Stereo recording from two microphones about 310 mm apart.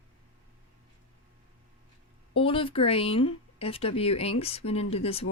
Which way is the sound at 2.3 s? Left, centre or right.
Centre.